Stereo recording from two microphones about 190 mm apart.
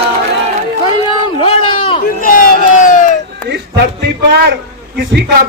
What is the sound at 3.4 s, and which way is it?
A man's voice, 60° right (ahead or behind).